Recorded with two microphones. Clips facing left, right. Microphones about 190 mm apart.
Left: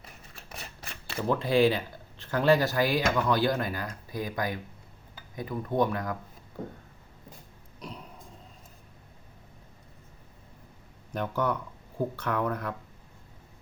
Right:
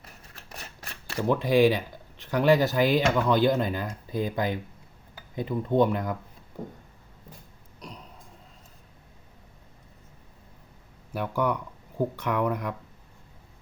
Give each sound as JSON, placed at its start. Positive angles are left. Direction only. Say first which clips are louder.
{"t": 1.2, "sound": "speech", "louder": "right 3 dB", "side_deg": -15}
{"t": 7.8, "sound": "a sound", "louder": "left 2 dB", "side_deg": 0}
{"t": 11.1, "sound": "speech", "louder": "right 2 dB", "side_deg": -10}